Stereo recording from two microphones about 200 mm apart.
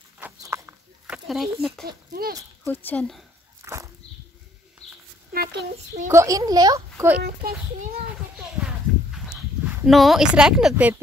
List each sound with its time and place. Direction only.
0.2 s a sound: 15° right (ahead or behind)
1.9 s speech: 50° right (ahead or behind)
2.6 s speech: 10° left (ahead or behind)
3.6 s a sound: 15° right (ahead or behind)
6.0 s a child's voice: 15° right (ahead or behind)
7.2 s speech: 50° right (ahead or behind)
8.4 s horse: 5° right (ahead or behind)
9.8 s a woman's voice: centre (ahead or behind)